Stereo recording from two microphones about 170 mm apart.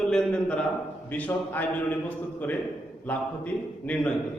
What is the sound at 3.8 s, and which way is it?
Speech, 10° left (ahead or behind).